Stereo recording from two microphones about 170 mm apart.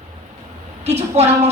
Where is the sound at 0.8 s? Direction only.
40° right (ahead or behind).